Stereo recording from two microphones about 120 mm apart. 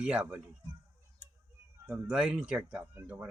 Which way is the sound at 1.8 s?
10° right (ahead or behind).